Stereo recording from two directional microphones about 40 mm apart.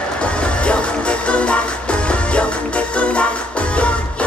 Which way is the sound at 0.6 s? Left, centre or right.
Left.